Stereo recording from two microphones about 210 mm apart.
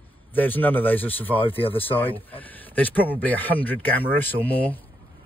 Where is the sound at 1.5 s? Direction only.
25° left (ahead or behind).